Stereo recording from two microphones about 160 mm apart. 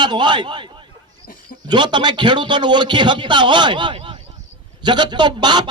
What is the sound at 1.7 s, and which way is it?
A man's voice, 30° right (ahead or behind).